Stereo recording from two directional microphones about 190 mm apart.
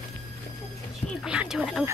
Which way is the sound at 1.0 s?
5° right (ahead or behind).